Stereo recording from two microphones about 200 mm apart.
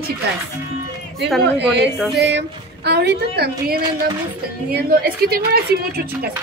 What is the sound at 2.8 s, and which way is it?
A woman's voice, 55° right (ahead or behind).